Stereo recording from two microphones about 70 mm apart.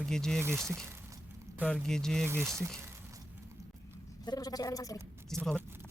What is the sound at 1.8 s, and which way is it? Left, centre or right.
Speech, centre.